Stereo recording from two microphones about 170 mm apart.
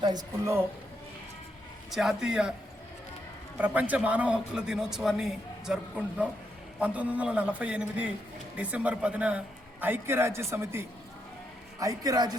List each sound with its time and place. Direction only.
0.0 s a woman's voice: 20° right (ahead or behind)
1.9 s a man's voice: centre (ahead or behind)
3.6 s a man's voice: 10° right (ahead or behind)